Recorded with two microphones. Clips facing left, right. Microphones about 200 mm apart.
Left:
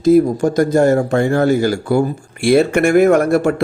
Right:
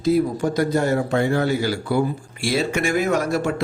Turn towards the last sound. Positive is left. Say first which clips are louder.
# left 8 dB
turn(degrees=55)  # may be behind; listen again after turning